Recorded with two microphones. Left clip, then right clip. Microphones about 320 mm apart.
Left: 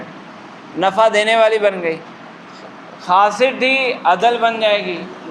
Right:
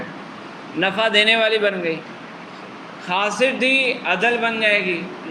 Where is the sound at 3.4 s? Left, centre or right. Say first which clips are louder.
Left 3 dB; centre.